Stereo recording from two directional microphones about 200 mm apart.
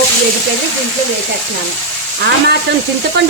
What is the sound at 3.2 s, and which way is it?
Speech, 60° right (ahead or behind).